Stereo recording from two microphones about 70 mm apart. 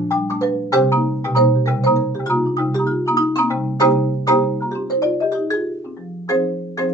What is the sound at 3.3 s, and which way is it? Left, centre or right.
Music, left.